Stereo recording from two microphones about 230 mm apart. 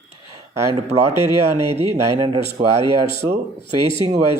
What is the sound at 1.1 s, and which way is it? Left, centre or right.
Speech, right.